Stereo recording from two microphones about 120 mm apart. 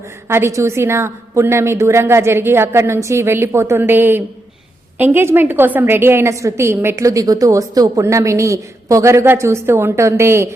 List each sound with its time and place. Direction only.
0.3 s a woman's voice: 20° right (ahead or behind)